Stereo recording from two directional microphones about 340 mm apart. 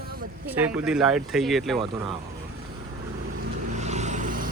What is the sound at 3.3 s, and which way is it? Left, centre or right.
Vehicle, right.